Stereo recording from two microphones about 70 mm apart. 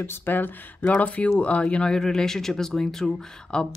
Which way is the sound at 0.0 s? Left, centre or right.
Left.